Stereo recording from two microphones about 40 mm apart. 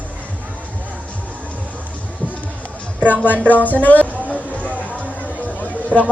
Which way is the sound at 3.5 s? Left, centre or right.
Left.